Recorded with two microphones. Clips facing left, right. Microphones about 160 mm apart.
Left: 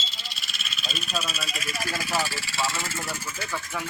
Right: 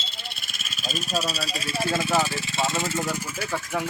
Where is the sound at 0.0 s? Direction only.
55° right (ahead or behind); by 3.4 s 15° right (ahead or behind).